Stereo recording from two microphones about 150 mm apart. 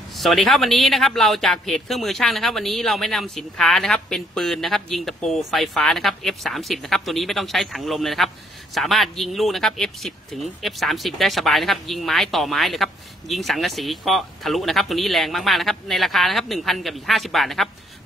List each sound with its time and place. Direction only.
0.1 s speech: centre (ahead or behind)